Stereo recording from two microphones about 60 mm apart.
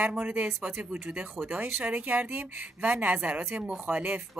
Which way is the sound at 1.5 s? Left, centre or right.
Right.